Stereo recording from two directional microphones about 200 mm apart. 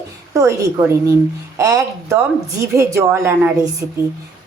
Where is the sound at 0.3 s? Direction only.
15° right (ahead or behind).